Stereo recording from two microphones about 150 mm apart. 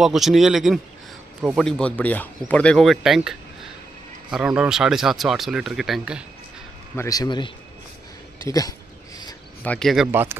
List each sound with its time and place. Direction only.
0.0 s speech: centre (ahead or behind)
7.0 s speech: 25° left (ahead or behind)
9.6 s speech: 5° left (ahead or behind)